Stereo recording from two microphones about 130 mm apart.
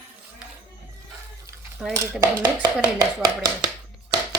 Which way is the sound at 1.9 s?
25° right (ahead or behind).